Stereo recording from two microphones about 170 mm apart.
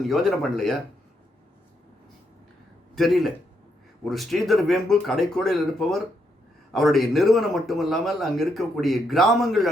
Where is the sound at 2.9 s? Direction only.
Centre (ahead or behind).